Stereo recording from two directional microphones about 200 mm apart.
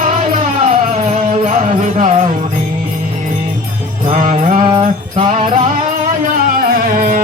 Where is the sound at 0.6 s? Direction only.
35° right (ahead or behind).